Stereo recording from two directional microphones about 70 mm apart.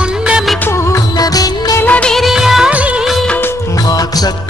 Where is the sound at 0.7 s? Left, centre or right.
Left.